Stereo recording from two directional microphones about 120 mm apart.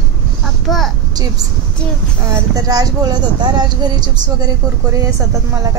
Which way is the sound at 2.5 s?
30° right (ahead or behind).